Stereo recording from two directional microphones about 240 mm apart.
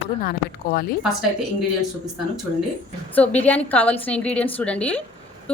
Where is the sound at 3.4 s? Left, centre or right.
Centre.